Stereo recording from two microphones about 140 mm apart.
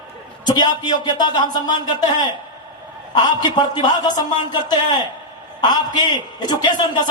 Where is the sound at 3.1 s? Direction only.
30° left (ahead or behind).